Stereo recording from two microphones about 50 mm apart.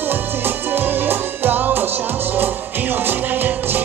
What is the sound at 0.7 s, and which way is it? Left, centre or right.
Music, right.